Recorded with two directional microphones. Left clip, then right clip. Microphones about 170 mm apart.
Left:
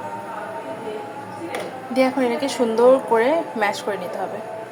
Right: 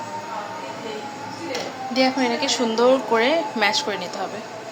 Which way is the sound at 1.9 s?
25° left (ahead or behind).